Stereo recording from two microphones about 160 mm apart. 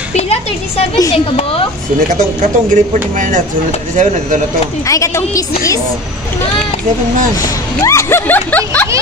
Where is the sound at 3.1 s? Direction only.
55° right (ahead or behind).